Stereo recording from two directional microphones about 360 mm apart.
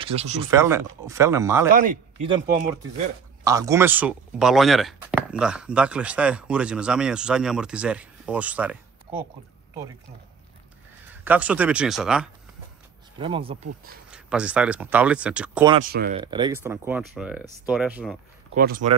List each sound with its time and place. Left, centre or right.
0.0 s speech: centre
1.7 s a man's voice: right
3.4 s speech: centre
9.1 s speech: centre
11.2 s speech: centre
13.2 s speech: centre
14.1 s speech: centre
15.9 s speech: right
16.2 s speech: centre
18.5 s speech: right